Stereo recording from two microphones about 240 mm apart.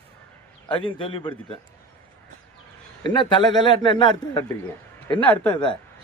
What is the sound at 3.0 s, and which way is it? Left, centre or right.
Speech, centre.